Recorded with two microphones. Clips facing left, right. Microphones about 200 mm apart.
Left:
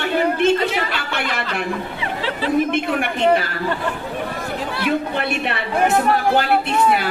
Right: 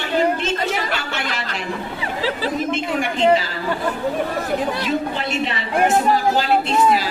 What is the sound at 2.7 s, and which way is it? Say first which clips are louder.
Speech: left 1 dB; 60° left (ahead or behind).